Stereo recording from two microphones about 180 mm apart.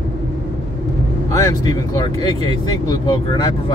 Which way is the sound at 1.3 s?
20° left (ahead or behind).